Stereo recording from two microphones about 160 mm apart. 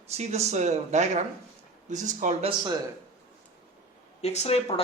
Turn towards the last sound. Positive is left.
turn(degrees=40)  # may be behind; listen again after turning